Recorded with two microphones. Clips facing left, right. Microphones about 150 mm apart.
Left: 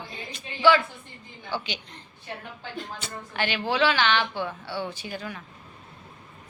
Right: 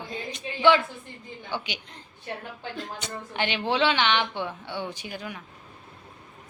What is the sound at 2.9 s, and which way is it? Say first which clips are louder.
A woman's voice: right 1 dB; 20° right (ahead or behind).